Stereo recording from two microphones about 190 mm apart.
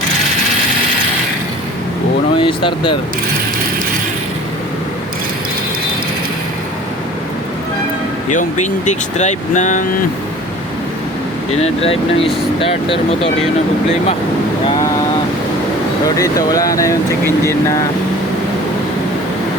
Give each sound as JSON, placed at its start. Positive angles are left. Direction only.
{"t": 2.4, "sound": "speech", "side_deg": 25}
{"t": 8.3, "sound": "speech", "side_deg": 40}
{"t": 11.6, "sound": "speech", "side_deg": 30}
{"t": 16.0, "sound": "speech", "side_deg": 20}